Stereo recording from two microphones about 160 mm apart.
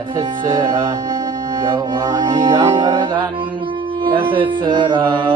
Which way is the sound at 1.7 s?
25° right (ahead or behind).